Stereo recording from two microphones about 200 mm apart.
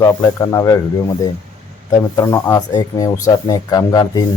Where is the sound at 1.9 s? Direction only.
15° left (ahead or behind).